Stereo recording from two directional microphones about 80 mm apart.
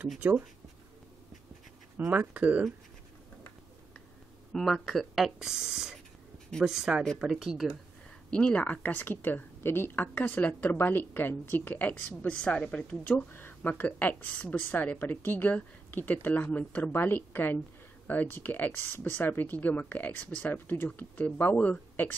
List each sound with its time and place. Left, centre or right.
0.2 s speech: right
2.1 s speech: centre
4.5 s speech: centre
8.3 s a woman's voice: centre
13.3 s a woman's voice: left